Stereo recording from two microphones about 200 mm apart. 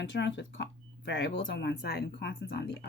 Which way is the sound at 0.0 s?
60° left (ahead or behind).